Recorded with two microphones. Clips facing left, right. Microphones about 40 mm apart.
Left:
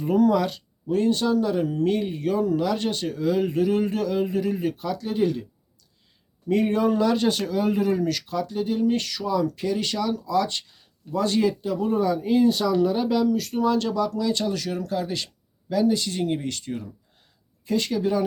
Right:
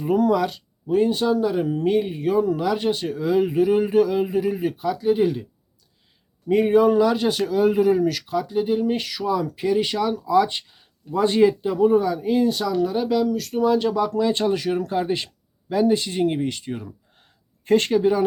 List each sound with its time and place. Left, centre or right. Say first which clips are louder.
0.0 s speech: right 1 dB; centre
6.5 s speech: right 5 dB; centre
13.7 s speech: right 3 dB; centre
14.1 s speech: right 4 dB; right
17.7 s speech: right 7 dB; right
17.9 s speech: right 5 dB; centre